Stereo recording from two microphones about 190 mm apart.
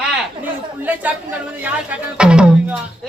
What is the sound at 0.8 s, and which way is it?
A man's voice, 10° right (ahead or behind).